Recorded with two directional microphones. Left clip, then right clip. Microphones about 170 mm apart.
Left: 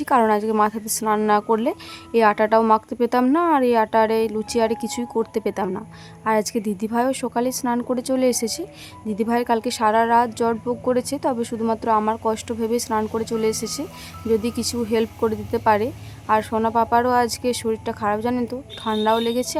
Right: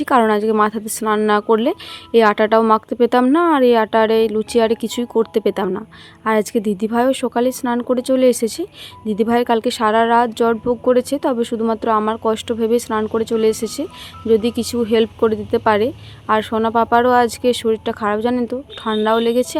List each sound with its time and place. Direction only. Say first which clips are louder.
0.0 s a woman's voice: right 3 dB; 20° right (ahead or behind)